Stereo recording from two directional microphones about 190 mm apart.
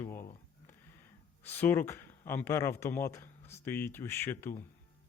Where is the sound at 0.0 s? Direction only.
10° left (ahead or behind).